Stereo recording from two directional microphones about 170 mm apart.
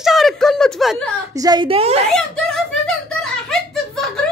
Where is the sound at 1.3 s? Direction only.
20° right (ahead or behind).